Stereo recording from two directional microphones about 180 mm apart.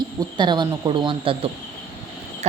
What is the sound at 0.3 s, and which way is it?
A woman's voice, 25° right (ahead or behind).